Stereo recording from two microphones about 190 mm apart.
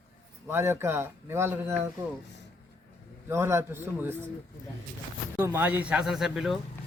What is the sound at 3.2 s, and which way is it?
Speech, 15° right (ahead or behind).